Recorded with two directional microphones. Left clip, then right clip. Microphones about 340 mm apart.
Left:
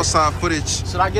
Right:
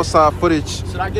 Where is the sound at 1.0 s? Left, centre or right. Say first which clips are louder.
Left 4 dB; centre.